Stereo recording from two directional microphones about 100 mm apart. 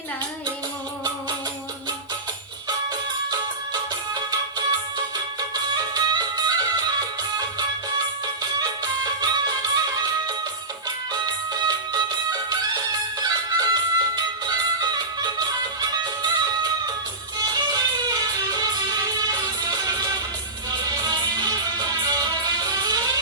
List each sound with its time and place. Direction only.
3.2 s music: 40° right (ahead or behind)
8.5 s music: 40° right (ahead or behind)
10.8 s music: 40° right (ahead or behind)
17.3 s music: 40° right (ahead or behind)